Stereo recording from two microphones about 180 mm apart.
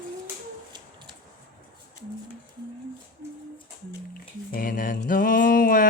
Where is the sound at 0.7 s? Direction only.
25° right (ahead or behind).